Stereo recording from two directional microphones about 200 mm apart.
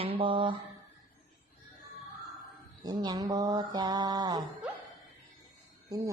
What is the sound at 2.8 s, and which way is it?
Mantra, 20° right (ahead or behind).